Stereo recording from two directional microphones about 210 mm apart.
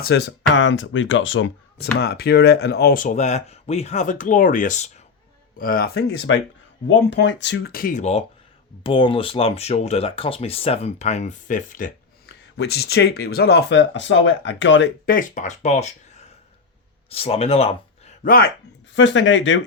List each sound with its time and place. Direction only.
0.0 s speech: 55° left (ahead or behind); by 12.3 s 40° left (ahead or behind)
12.5 s speech: 50° left (ahead or behind)
15.0 s speech: 40° left (ahead or behind)
18.9 s speech: 60° left (ahead or behind)